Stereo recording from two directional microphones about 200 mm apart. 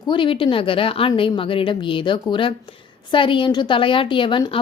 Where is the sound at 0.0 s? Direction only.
25° left (ahead or behind).